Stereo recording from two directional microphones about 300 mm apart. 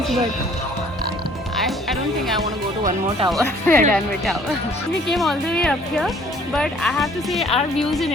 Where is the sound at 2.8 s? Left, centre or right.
Centre.